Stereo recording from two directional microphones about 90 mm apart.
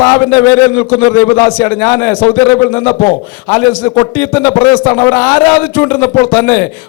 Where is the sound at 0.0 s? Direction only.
25° left (ahead or behind).